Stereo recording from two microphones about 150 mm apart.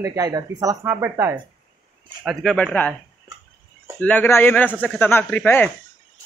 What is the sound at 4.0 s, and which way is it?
Speech, 10° left (ahead or behind).